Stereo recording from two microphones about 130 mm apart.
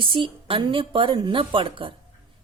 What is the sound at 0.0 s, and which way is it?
A woman's voice, 40° right (ahead or behind).